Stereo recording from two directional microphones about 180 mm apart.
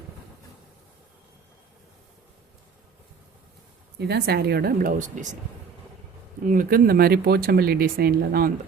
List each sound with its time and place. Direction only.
3.9 s speech: 65° right (ahead or behind); by 5.4 s 45° right (ahead or behind)
6.4 s speech: 50° right (ahead or behind)